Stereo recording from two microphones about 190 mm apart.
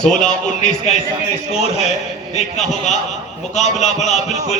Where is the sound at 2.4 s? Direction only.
35° left (ahead or behind).